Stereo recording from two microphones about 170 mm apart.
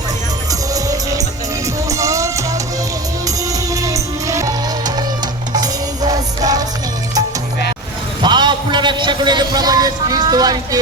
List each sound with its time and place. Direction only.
0.7 s music: 20° right (ahead or behind)
5.5 s music: 20° right (ahead or behind)
8.2 s a sound: 25° right (ahead or behind)